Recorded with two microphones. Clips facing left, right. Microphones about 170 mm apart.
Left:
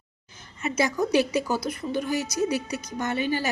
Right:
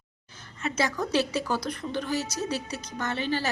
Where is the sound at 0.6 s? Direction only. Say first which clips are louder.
Left 3 dB; 10° left (ahead or behind).